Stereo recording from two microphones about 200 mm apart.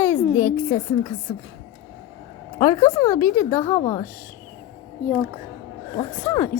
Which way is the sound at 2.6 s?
15° left (ahead or behind).